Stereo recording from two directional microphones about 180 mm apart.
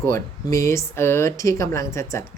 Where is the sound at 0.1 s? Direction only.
15° left (ahead or behind).